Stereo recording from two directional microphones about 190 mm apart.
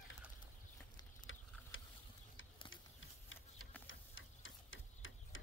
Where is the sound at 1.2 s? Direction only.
90° left.